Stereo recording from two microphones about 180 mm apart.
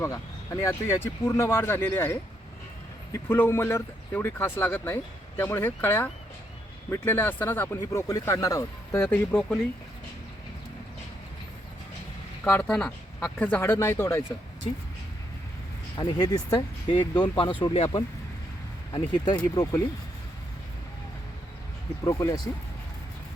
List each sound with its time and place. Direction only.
0.0 s speech: 15° left (ahead or behind)
12.5 s speech: 10° left (ahead or behind)
16.0 s speech: 20° left (ahead or behind)
18.9 s speech: 25° left (ahead or behind)
22.0 s speech: 20° left (ahead or behind)